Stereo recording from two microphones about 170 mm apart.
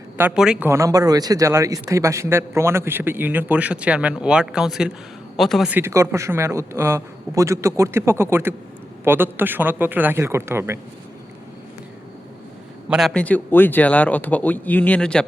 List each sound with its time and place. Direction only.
0.2 s a man's voice: 5° right (ahead or behind)
0.7 s a man's voice: 20° right (ahead or behind); by 5.7 s centre (ahead or behind)
5.7 s a man's voice: 15° right (ahead or behind)
12.9 s speech: centre (ahead or behind)